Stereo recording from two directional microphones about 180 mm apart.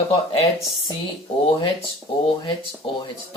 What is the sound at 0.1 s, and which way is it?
Speech, 30° left (ahead or behind).